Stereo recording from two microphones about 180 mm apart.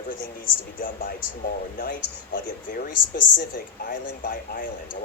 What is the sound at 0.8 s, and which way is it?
Speech, 50° left (ahead or behind).